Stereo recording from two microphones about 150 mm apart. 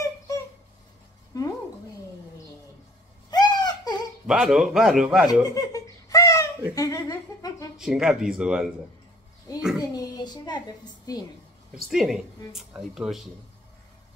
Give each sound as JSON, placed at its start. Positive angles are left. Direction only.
{"t": 1.3, "sound": "a sound", "side_deg": 25}
{"t": 3.3, "sound": "a sound", "side_deg": 25}
{"t": 4.3, "sound": "a woman's voice", "side_deg": -5}
{"t": 5.3, "sound": "giggle", "side_deg": 25}
{"t": 6.7, "sound": "speech", "side_deg": 20}
{"t": 7.7, "sound": "a woman's voice", "side_deg": -5}
{"t": 9.8, "sound": "a child's voice", "side_deg": 25}
{"t": 11.9, "sound": "a woman's voice", "side_deg": -5}